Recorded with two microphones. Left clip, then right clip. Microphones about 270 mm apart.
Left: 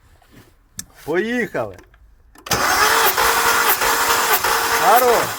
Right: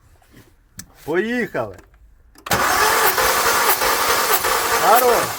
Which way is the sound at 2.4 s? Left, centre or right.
Centre.